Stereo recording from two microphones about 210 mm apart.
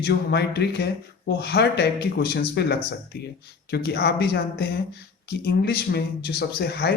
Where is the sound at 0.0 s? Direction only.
50° left (ahead or behind).